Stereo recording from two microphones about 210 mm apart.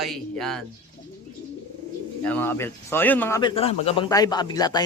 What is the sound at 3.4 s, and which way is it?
A man's voice, 25° left (ahead or behind).